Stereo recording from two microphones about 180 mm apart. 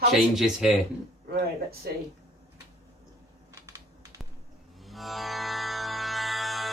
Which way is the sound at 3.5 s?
20° right (ahead or behind).